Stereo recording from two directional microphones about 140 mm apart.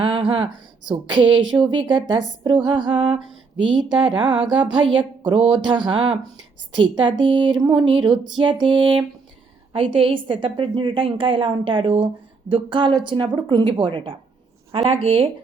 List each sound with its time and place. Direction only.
0.0 s a woman's voice: 35° right (ahead or behind)